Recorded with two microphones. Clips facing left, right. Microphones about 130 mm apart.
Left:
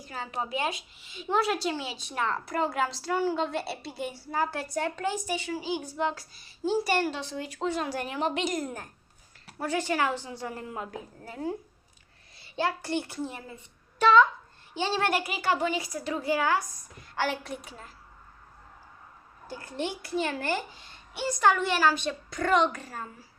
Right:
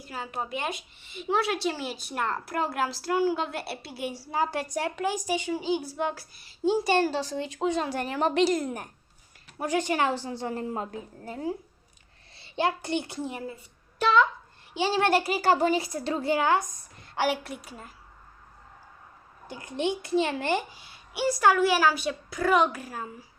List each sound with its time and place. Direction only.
0.1 s a woman's voice: centre (ahead or behind)
4.3 s a child's voice: 20° right (ahead or behind)
7.0 s speech: 35° right (ahead or behind)
7.4 s speech: 20° right (ahead or behind)
9.6 s a child's voice: 20° right (ahead or behind)
12.4 s a child's voice: 20° right (ahead or behind)
14.7 s a child's voice: 10° right (ahead or behind)
15.0 s a child's voice: 30° right (ahead or behind)
17.4 s a woman's voice: 5° right (ahead or behind)
19.5 s a child's voice: 15° right (ahead or behind)